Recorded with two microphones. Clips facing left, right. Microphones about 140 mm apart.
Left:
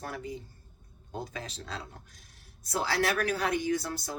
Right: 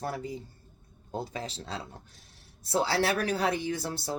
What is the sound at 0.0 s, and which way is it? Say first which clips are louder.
Speech: right 3 dB; 30° right (ahead or behind).